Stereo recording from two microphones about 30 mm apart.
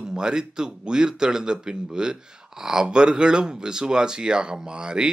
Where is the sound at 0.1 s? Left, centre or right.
Right.